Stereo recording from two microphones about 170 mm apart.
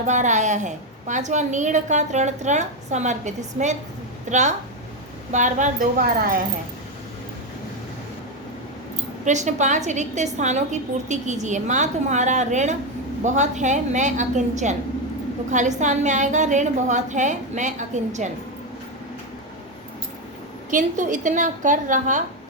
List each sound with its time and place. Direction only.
0.1 s a woman's voice: 45° right (ahead or behind)
9.2 s a woman's voice: 45° right (ahead or behind)
20.7 s a woman's voice: 50° right (ahead or behind)